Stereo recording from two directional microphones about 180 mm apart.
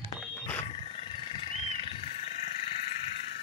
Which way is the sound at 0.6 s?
35° left (ahead or behind).